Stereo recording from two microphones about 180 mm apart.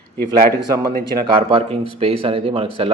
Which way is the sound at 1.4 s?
30° right (ahead or behind).